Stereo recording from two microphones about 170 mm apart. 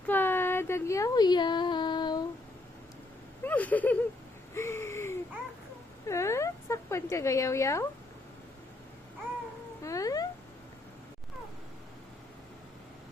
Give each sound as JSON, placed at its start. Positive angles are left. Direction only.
{"t": 0.1, "sound": "a sound", "side_deg": 10}
{"t": 3.4, "sound": "speech", "side_deg": 10}
{"t": 4.5, "sound": "gasp", "side_deg": 15}
{"t": 6.1, "sound": "speech", "side_deg": 15}
{"t": 9.8, "sound": "cat", "side_deg": 20}